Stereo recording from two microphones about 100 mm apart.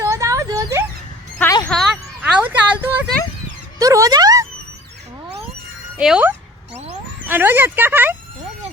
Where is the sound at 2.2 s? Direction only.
15° right (ahead or behind).